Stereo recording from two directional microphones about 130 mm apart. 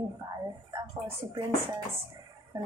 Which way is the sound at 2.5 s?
30° right (ahead or behind).